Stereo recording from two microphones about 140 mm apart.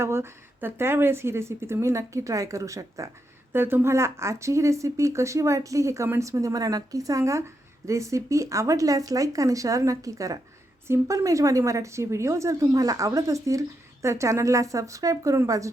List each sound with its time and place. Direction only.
0.0 s speech: 20° right (ahead or behind)